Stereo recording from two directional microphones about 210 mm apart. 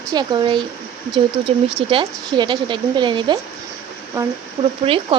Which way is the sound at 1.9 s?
25° right (ahead or behind).